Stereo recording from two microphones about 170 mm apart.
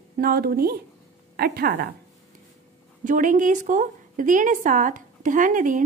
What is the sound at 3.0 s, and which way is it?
A woman's voice, 50° right (ahead or behind).